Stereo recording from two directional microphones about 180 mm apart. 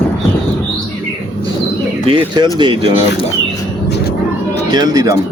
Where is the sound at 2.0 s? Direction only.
30° right (ahead or behind).